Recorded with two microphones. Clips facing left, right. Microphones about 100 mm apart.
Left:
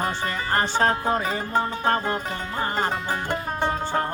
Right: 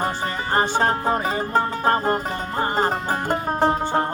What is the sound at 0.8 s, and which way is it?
Music, 30° right (ahead or behind).